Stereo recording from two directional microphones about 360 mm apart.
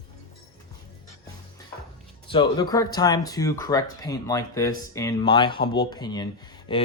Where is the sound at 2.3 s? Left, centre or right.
Centre.